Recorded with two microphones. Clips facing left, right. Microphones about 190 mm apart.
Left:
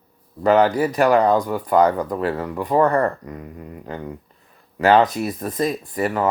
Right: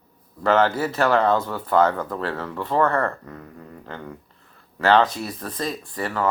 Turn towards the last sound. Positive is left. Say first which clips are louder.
# left 5 dB
turn(degrees=20)  # may be behind; listen again after turning